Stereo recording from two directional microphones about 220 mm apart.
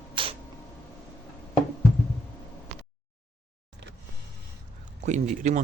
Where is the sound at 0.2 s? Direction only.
20° right (ahead or behind).